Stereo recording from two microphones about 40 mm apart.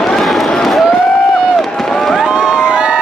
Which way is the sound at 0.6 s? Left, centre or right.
Centre.